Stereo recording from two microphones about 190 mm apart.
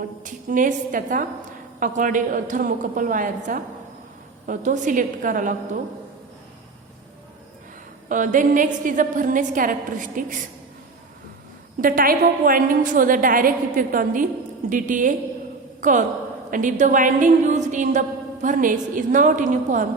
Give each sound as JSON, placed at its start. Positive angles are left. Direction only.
{"t": 0.3, "sound": "a woman's voice", "side_deg": -45}
{"t": 8.1, "sound": "a woman's voice", "side_deg": -45}
{"t": 11.8, "sound": "a woman's voice", "side_deg": -45}